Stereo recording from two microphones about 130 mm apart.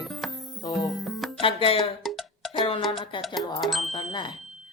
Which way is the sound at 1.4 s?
45° left (ahead or behind).